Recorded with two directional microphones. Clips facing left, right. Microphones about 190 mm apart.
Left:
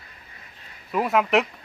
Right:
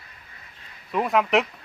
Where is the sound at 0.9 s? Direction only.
5° left (ahead or behind).